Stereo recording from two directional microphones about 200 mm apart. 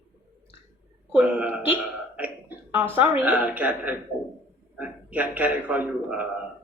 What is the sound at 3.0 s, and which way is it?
A woman's voice, 10° right (ahead or behind).